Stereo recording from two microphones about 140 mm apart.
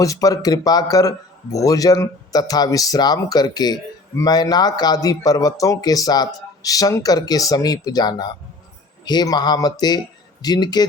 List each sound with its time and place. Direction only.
0.0 s speech: 25° left (ahead or behind)